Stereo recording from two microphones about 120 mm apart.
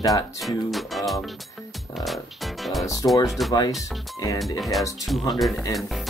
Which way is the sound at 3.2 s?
Centre (ahead or behind).